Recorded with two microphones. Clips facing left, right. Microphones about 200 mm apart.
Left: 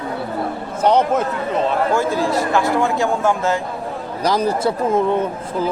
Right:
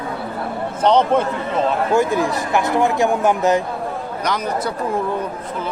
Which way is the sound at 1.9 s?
15° right (ahead or behind).